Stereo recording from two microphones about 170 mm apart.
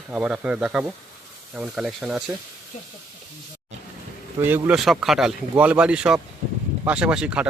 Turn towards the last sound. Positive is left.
turn(degrees=-5)  # may be behind; listen again after turning